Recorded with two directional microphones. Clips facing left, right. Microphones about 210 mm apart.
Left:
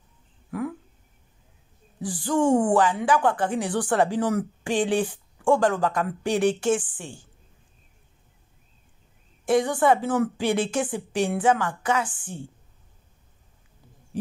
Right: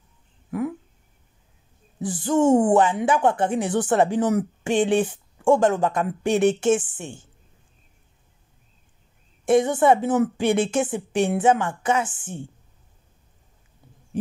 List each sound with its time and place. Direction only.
0.5 s a sound: 20° right (ahead or behind)
2.0 s speech: 20° right (ahead or behind)
9.5 s speech: 25° right (ahead or behind)